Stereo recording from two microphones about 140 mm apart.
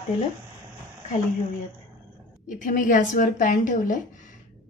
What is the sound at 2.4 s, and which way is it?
Speech, 70° left (ahead or behind).